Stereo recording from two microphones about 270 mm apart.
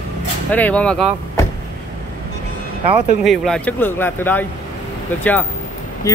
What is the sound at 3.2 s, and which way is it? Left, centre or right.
Speech, centre.